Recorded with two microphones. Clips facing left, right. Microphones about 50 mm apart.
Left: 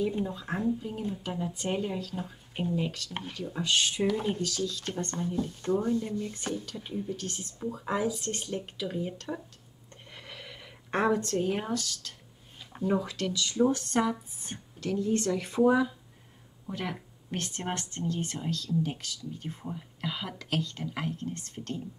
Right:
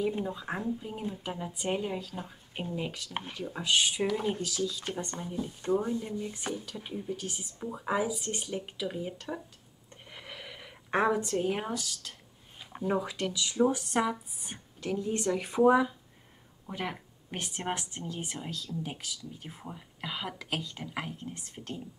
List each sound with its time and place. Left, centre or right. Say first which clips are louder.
0.0 s a woman's voice: left 1 dB; centre